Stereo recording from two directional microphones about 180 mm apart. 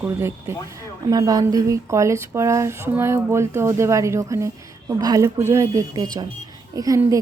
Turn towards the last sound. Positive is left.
turn(degrees=-20)  # may be behind; listen again after turning